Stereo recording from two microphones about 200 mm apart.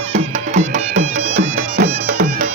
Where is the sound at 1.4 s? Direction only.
55° right (ahead or behind).